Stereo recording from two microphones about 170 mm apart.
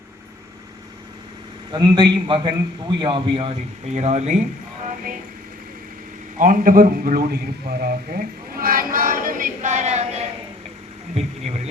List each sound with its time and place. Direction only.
1.7 s a man's voice: 25° right (ahead or behind); by 4.4 s 40° right (ahead or behind)
6.4 s a man's voice: 55° right (ahead or behind)